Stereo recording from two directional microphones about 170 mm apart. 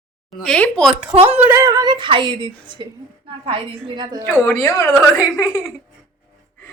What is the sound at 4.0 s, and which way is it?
Speech, 25° right (ahead or behind).